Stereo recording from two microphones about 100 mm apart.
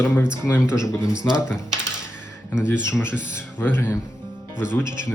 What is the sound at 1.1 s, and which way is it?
Speech, 10° right (ahead or behind).